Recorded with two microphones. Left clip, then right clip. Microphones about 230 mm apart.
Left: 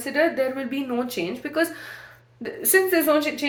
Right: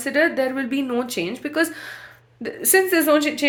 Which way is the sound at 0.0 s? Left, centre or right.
Right.